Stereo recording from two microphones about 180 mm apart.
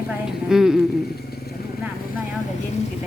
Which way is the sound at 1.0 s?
60° left (ahead or behind).